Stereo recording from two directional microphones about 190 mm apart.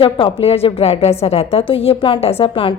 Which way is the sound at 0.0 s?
30° left (ahead or behind).